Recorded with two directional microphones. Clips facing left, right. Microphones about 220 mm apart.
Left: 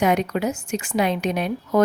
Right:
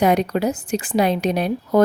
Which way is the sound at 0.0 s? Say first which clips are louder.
Right 3 dB; 35° right (ahead or behind).